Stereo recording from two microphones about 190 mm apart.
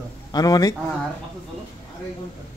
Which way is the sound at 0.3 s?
20° left (ahead or behind).